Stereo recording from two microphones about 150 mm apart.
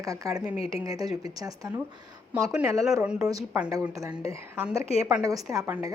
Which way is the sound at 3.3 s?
25° right (ahead or behind).